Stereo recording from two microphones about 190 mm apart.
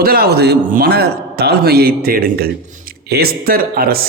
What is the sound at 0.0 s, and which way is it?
Speech, 55° right (ahead or behind).